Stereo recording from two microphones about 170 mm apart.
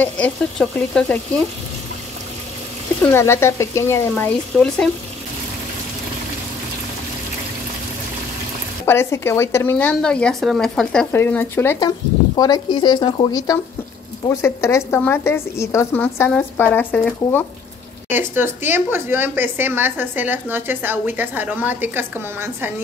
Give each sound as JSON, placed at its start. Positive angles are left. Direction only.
{"t": 0.0, "sound": "a woman's voice", "side_deg": 5}
{"t": 3.0, "sound": "a woman's voice", "side_deg": 15}
{"t": 8.8, "sound": "a woman's voice", "side_deg": 15}
{"t": 18.1, "sound": "a woman's voice", "side_deg": -10}